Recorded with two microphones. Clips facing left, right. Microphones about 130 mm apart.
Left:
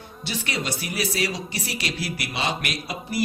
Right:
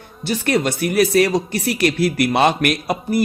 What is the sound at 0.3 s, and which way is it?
Speech, 50° right (ahead or behind).